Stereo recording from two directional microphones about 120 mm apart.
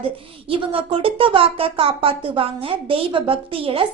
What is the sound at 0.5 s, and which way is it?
A woman's voice, 50° right (ahead or behind).